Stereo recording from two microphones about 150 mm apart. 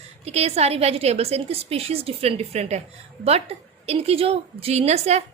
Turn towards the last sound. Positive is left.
turn(degrees=-45)  # may be behind; listen again after turning